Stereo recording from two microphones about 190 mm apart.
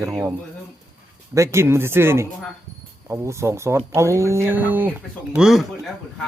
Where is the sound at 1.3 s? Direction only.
15° right (ahead or behind).